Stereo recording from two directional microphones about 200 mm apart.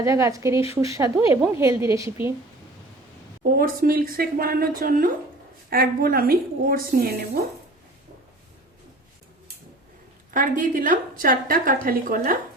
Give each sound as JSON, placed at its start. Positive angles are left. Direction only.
{"t": 0.0, "sound": "a woman's voice", "side_deg": -15}
{"t": 3.4, "sound": "a woman's voice", "side_deg": -45}
{"t": 10.3, "sound": "a woman's voice", "side_deg": -40}